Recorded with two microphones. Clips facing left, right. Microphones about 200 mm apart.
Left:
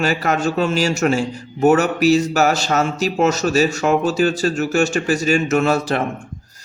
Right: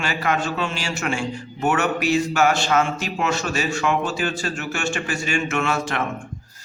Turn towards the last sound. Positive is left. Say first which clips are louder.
# left 6 dB
turn(degrees=35)  # may be behind; listen again after turning